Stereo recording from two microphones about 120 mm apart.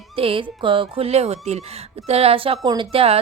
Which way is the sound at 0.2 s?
50° right (ahead or behind).